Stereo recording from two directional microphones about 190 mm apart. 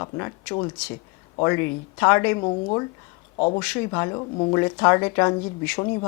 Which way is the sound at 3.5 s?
10° left (ahead or behind).